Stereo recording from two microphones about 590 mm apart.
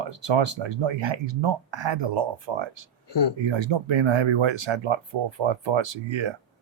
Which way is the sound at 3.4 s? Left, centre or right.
Right.